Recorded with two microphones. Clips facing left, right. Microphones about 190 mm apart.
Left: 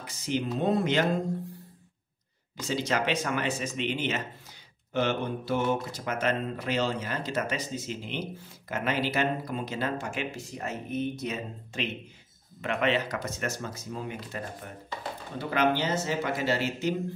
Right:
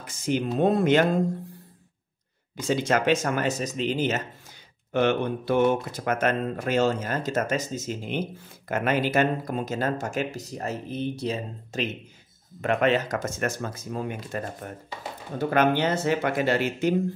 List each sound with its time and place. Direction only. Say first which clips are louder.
0.0 s speech: right 4 dB; 50° right (ahead or behind)
2.7 s speech: right 6 dB; 50° right (ahead or behind)
4.9 s speech: right 5 dB; 60° right (ahead or behind)